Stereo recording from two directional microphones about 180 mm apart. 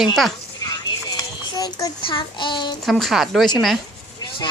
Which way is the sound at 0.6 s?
20° left (ahead or behind).